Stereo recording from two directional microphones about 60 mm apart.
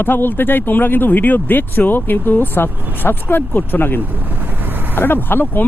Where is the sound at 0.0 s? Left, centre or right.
Left.